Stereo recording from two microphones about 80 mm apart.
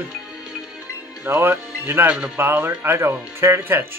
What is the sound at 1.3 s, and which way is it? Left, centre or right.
Speech, right.